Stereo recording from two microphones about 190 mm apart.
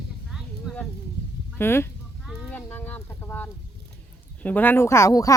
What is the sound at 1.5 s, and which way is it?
Speech, 10° left (ahead or behind).